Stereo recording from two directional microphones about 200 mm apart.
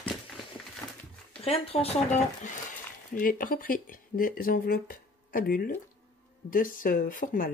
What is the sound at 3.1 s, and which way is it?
Speech, 45° left (ahead or behind).